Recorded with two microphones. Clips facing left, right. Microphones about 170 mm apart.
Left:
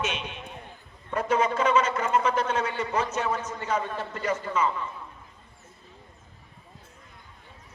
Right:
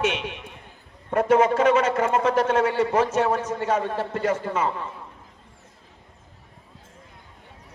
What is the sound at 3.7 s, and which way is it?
Speech, 65° right (ahead or behind).